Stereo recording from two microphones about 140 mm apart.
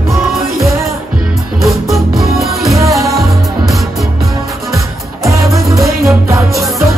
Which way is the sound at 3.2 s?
Centre (ahead or behind).